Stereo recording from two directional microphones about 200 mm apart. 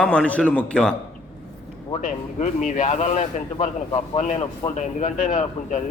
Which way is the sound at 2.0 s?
40° left (ahead or behind).